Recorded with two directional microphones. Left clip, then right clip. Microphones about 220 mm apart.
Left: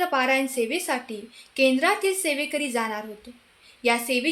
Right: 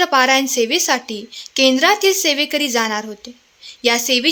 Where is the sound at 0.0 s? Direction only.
40° right (ahead or behind).